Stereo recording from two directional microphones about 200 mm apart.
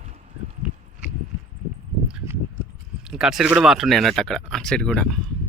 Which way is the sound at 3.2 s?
Centre (ahead or behind).